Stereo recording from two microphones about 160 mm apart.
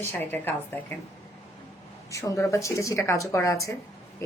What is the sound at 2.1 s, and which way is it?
Speech, 20° left (ahead or behind).